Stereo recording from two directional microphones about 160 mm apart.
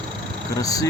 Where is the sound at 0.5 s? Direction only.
20° left (ahead or behind).